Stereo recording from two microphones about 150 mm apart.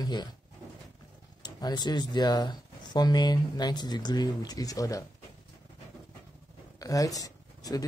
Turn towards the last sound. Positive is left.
turn(degrees=25)  # may be behind; listen again after turning